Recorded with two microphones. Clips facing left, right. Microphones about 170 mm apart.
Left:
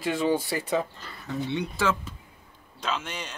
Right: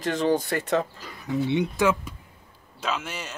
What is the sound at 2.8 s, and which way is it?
Speech, 5° right (ahead or behind).